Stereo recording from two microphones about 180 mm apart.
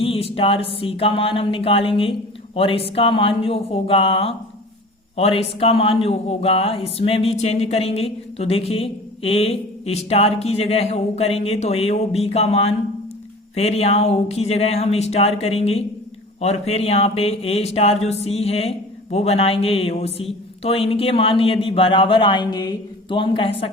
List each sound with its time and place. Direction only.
0.0 s a man's voice: 30° left (ahead or behind)